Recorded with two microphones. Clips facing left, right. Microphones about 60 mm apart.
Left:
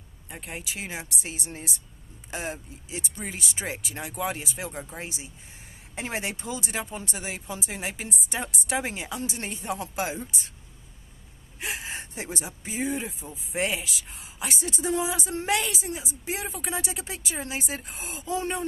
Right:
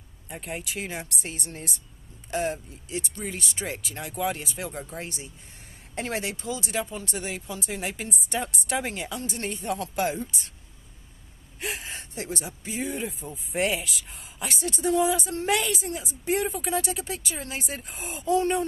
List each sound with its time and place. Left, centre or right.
0.3 s speech: centre
5.9 s speech: centre
11.6 s gasp: centre
12.0 s speech: centre
12.8 s speech: centre